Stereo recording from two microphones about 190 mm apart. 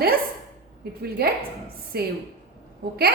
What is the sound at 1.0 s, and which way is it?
A woman's voice, 55° right (ahead or behind).